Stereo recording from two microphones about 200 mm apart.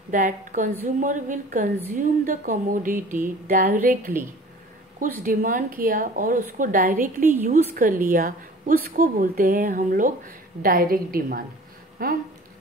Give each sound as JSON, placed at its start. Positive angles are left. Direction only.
{"t": 0.1, "sound": "speech", "side_deg": -40}
{"t": 5.2, "sound": "speech", "side_deg": -40}